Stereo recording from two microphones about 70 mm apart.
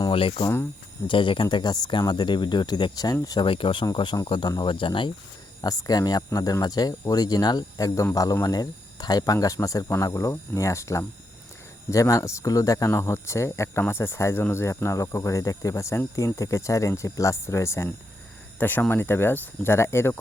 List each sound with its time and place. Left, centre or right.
1.0 s speech: left
1.5 s speech: left
5.6 s speech: left
12.9 s speech: left
18.6 s speech: left